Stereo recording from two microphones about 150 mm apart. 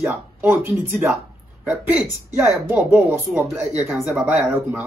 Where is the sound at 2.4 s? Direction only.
15° right (ahead or behind).